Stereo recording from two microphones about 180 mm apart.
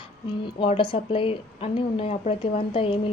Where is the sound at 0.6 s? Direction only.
30° left (ahead or behind).